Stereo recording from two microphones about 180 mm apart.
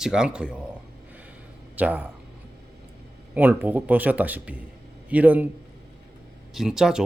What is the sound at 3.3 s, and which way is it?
Speech, 10° right (ahead or behind).